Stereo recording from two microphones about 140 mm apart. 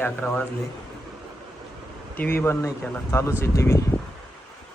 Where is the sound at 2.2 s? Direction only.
15° left (ahead or behind).